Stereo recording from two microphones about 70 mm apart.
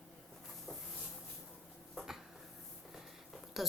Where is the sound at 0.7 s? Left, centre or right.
Right.